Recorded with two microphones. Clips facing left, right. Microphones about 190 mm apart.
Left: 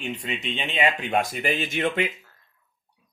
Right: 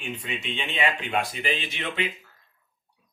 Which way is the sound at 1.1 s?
45° left (ahead or behind).